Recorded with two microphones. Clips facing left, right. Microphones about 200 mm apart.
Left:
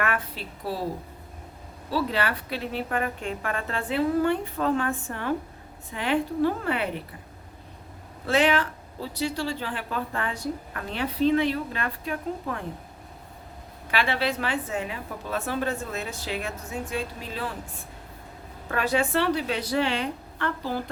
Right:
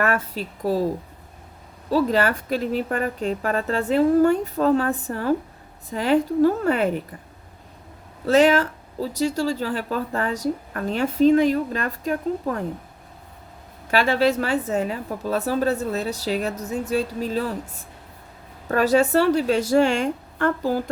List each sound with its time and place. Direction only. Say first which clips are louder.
0.0 s a woman's voice: right 6 dB; 40° right (ahead or behind)
1.9 s speech: right 7 dB; 45° right (ahead or behind)
8.3 s speech: right 6 dB; 40° right (ahead or behind)
13.9 s a woman's voice: right 7 dB; 40° right (ahead or behind)